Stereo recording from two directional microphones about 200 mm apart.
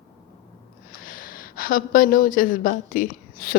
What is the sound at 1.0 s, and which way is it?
A woman's voice, 45° left (ahead or behind).